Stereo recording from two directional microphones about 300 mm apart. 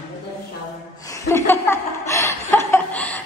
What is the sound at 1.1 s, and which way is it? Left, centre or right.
Chuckle, centre.